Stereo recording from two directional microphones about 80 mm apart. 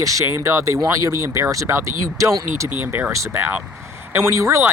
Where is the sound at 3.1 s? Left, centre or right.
Right.